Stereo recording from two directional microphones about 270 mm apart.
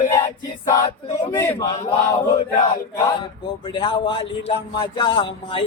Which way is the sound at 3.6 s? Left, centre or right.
Centre.